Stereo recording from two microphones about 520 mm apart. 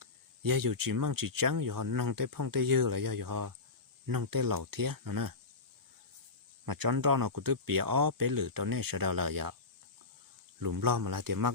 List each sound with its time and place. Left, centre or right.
0.0 s speech: right
6.7 s speech: right
10.6 s speech: right